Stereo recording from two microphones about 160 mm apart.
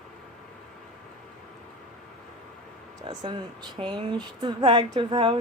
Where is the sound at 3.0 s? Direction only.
30° right (ahead or behind).